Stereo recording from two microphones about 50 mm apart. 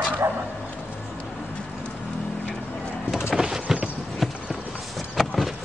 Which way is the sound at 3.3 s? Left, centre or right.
Centre.